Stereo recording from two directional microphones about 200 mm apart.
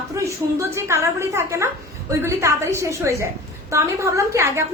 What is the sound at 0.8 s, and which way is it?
A woman's voice, 15° right (ahead or behind).